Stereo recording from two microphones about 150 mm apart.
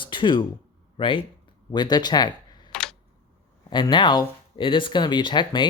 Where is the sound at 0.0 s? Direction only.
30° left (ahead or behind).